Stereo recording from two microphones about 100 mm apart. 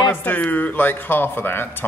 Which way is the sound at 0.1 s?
20° left (ahead or behind).